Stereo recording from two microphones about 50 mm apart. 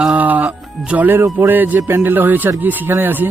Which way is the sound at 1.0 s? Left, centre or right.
Right.